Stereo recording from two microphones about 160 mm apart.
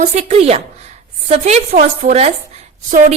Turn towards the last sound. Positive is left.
turn(degrees=-50)  # may be behind; listen again after turning